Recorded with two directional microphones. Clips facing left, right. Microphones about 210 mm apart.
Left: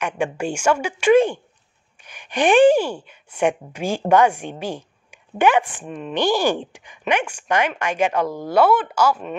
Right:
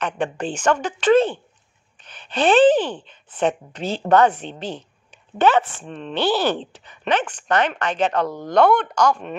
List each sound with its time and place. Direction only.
0.0 s a woman's voice: 10° left (ahead or behind)